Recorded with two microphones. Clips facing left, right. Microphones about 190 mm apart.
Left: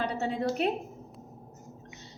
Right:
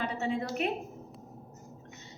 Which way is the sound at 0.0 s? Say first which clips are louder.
Left 2 dB; 35° left (ahead or behind).